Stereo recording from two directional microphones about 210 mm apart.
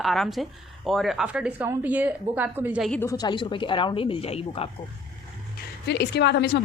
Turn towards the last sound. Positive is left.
turn(degrees=55)  # may be behind; listen again after turning